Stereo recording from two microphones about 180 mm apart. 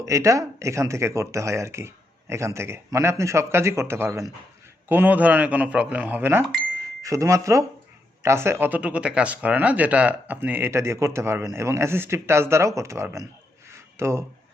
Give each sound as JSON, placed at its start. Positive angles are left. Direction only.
{"t": 0.0, "sound": "speech", "side_deg": -15}
{"t": 6.4, "sound": "speech", "side_deg": 0}
{"t": 7.0, "sound": "speech", "side_deg": -15}
{"t": 13.7, "sound": "a sound", "side_deg": -15}